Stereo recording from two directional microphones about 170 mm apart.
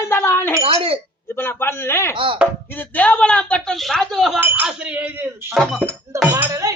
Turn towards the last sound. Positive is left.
turn(degrees=-20)  # may be behind; listen again after turning